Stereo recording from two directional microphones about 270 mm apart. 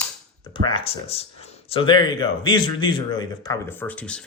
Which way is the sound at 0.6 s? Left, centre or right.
Centre.